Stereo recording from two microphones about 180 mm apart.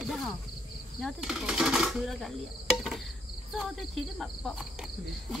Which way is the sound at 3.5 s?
Centre (ahead or behind).